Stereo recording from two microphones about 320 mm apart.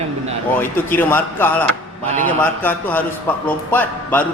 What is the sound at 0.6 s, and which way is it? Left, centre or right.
Speech, centre.